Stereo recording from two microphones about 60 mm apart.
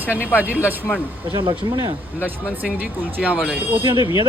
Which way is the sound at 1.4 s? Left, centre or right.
Right.